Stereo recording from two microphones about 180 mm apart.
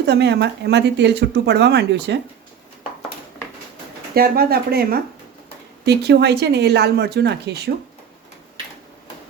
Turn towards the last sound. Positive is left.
turn(degrees=-65)  # may be behind; listen again after turning